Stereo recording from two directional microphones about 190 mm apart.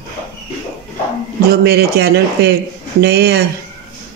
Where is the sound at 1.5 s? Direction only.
55° right (ahead or behind).